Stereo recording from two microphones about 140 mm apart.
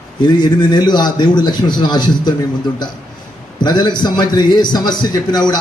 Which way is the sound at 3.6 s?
30° left (ahead or behind).